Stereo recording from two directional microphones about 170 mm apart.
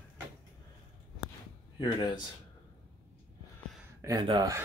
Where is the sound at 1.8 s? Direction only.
25° left (ahead or behind).